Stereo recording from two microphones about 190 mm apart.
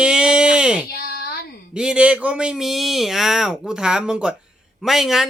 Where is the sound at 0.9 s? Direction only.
55° left (ahead or behind).